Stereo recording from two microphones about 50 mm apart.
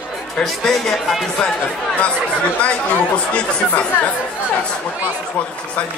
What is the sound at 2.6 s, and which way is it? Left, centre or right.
Speech, left.